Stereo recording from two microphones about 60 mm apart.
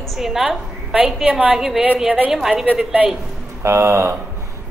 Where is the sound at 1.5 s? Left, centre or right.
Centre.